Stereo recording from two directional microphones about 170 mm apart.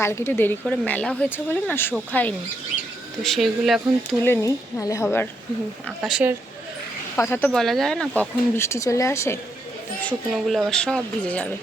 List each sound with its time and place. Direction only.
0.0 s speech: 15° left (ahead or behind); by 3.8 s centre (ahead or behind)
4.2 s speech: 15° left (ahead or behind)
6.0 s speech: 5° right (ahead or behind)
7.2 s speech: 15° left (ahead or behind)
7.5 s speech: centre (ahead or behind)
8.2 s speech: 15° left (ahead or behind)
10.0 s speech: 5° left (ahead or behind)